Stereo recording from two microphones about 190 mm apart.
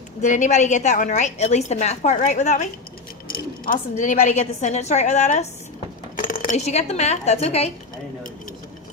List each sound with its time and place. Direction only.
0.2 s a woman's voice: 40° left (ahead or behind)
3.2 s a woman's voice: 50° left (ahead or behind); by 7.7 s 35° left (ahead or behind)